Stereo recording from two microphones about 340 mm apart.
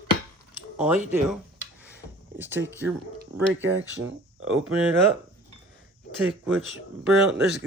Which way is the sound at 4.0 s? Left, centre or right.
Right.